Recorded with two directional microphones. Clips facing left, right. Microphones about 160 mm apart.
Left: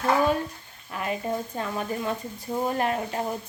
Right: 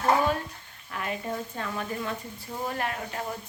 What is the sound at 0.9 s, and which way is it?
A woman's voice, 25° left (ahead or behind).